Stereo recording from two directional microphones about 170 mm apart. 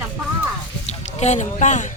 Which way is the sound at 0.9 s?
40° left (ahead or behind).